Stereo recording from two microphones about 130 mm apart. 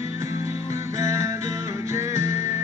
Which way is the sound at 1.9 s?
20° right (ahead or behind).